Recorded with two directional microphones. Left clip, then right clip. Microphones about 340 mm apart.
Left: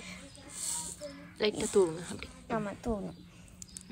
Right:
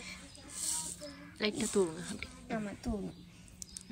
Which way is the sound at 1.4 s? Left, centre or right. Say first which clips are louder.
Left 5 dB; centre.